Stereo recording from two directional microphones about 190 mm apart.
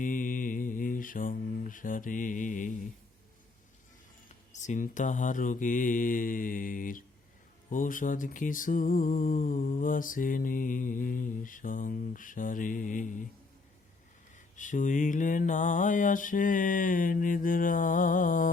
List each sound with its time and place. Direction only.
0.0 s mantra: 45° left (ahead or behind)
4.5 s mantra: 40° left (ahead or behind)
14.3 s mantra: 40° left (ahead or behind)